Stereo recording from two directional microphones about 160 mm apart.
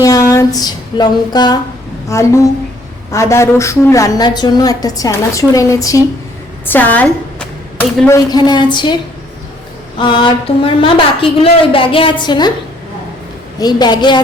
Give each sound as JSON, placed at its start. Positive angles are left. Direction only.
{"t": 0.0, "sound": "music", "side_deg": 20}
{"t": 2.0, "sound": "a woman's voice", "side_deg": 20}
{"t": 8.3, "sound": "a woman's voice", "side_deg": 25}
{"t": 10.0, "sound": "a woman's voice", "side_deg": 30}
{"t": 13.6, "sound": "a woman's voice", "side_deg": 25}